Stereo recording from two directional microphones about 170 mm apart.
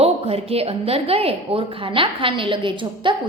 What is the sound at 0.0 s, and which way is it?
A woman's voice, 35° right (ahead or behind).